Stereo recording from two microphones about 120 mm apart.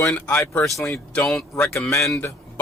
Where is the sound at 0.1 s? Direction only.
15° left (ahead or behind).